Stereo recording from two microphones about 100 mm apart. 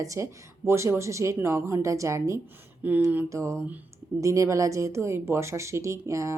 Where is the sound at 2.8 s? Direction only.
20° right (ahead or behind).